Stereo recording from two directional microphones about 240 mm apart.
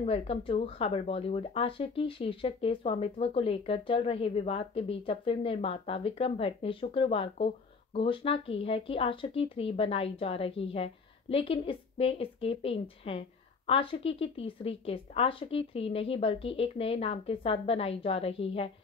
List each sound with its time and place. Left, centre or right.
0.0 s speech: left